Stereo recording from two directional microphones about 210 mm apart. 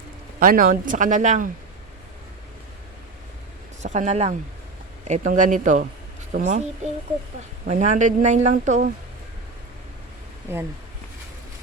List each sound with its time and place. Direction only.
0.3 s speech: 40° right (ahead or behind)
3.8 s speech: 35° right (ahead or behind)
7.7 s speech: 35° right (ahead or behind)